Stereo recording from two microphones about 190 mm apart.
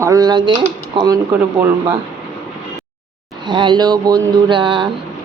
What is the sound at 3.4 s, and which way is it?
Speech, 25° right (ahead or behind).